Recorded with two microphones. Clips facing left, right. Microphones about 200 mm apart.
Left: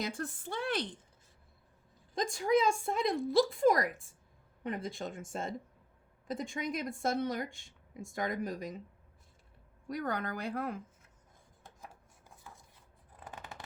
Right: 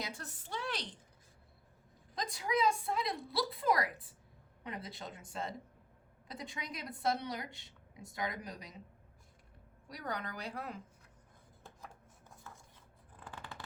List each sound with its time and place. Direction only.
0.0 s a woman's voice: 55° left (ahead or behind)
2.2 s a woman's voice: 45° left (ahead or behind)
9.9 s a woman's voice: 50° left (ahead or behind)
11.6 s rub: 10° left (ahead or behind)
12.4 s a sound: 15° left (ahead or behind)
13.2 s scissors: 20° left (ahead or behind)